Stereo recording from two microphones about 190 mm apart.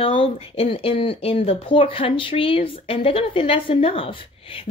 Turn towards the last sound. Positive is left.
turn(degrees=30)  # may be behind; listen again after turning